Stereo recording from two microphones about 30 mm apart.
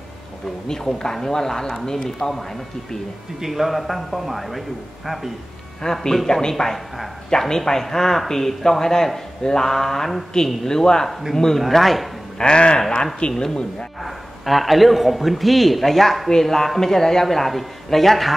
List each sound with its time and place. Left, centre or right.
0.7 s speech: left
2.0 s a man's voice: centre
3.3 s speech: centre
5.8 s a man's voice: centre
12.4 s speech: left
13.4 s speech: centre
14.0 s a man's voice: centre